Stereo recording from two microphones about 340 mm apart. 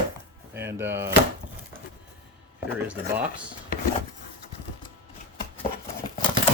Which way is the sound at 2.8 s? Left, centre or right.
Centre.